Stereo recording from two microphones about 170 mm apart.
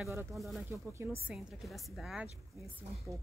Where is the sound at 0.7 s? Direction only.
15° right (ahead or behind).